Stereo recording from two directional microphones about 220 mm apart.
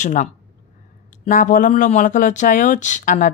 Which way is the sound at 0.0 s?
35° left (ahead or behind).